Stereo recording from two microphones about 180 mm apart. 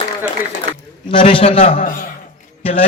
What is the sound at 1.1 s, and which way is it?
Speech, 30° left (ahead or behind).